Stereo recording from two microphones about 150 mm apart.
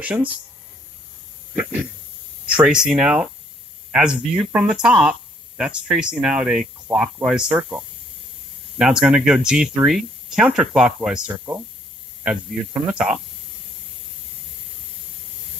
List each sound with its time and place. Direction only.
0.0 s speech: 10° right (ahead or behind)
1.5 s speech: 10° right (ahead or behind)